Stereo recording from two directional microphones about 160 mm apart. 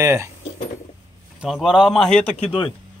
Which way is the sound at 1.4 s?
5° right (ahead or behind).